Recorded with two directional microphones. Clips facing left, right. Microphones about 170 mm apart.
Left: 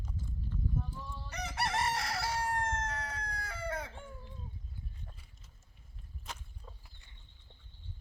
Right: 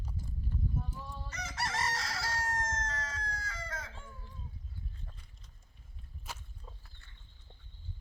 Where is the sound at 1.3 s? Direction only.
60° left (ahead or behind).